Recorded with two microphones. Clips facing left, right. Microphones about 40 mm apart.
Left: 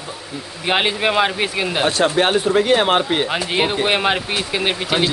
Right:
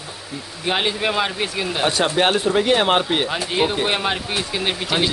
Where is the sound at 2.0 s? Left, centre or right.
Centre.